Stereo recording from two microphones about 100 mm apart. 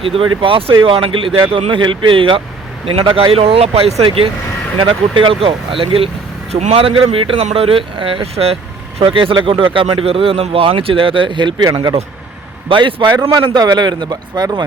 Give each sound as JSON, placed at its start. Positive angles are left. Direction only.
{"t": 0.0, "sound": "speech", "side_deg": -60}
{"t": 6.5, "sound": "speech", "side_deg": -85}
{"t": 9.0, "sound": "speech", "side_deg": -65}
{"t": 12.6, "sound": "speech", "side_deg": -55}
{"t": 13.3, "sound": "a man's voice", "side_deg": -40}